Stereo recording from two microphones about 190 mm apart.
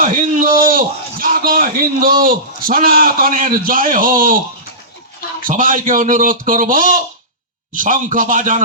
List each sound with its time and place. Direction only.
0.0 s a man's voice: 45° right (ahead or behind)
5.4 s a man's voice: 45° right (ahead or behind)